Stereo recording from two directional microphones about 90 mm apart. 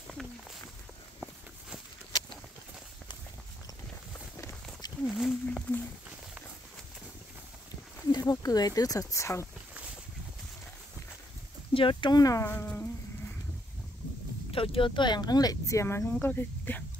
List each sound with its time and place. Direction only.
5.0 s wild animals: centre (ahead or behind)
8.1 s speech: 45° left (ahead or behind)
11.7 s speech: 70° left (ahead or behind)
12.2 s speech: 40° left (ahead or behind)
12.4 s speech: 20° left (ahead or behind)
14.5 s speech: 80° left; by 16.8 s 20° left (ahead or behind)